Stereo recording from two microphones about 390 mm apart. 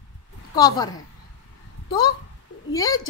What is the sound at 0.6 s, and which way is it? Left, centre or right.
Speech, centre.